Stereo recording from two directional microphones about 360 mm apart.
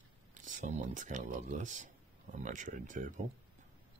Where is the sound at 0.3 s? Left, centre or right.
Centre.